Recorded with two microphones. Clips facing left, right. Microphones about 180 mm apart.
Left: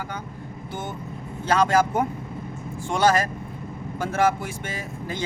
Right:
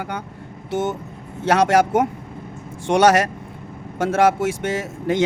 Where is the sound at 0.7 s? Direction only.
80° right.